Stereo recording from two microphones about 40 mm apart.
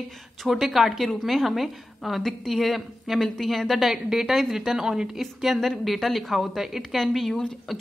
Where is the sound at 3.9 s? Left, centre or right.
Centre.